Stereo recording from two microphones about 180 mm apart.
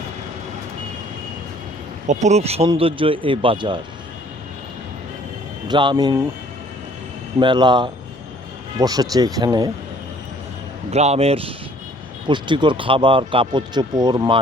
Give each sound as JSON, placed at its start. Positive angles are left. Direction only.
{"t": 2.0, "sound": "speech", "side_deg": -40}
{"t": 5.6, "sound": "speech", "side_deg": -25}
{"t": 7.3, "sound": "speech", "side_deg": -25}
{"t": 10.9, "sound": "speech", "side_deg": -35}